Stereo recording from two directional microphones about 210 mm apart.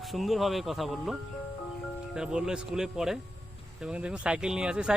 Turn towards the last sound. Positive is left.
turn(degrees=-5)  # may be behind; listen again after turning